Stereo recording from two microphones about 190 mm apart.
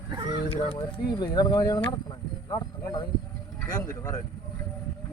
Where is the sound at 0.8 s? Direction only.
20° left (ahead or behind).